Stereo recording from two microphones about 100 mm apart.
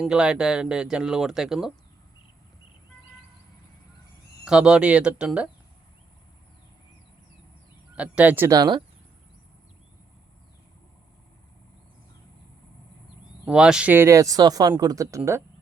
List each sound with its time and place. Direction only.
0.0 s speech: 10° right (ahead or behind)
4.4 s speech: 5° right (ahead or behind)
7.9 s speech: 10° right (ahead or behind)
8.4 s speech: 40° right (ahead or behind)
13.5 s speech: 5° right (ahead or behind)
13.9 s speech: 30° right (ahead or behind)